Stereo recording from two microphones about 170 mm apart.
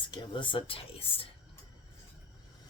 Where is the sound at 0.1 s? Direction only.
30° left (ahead or behind).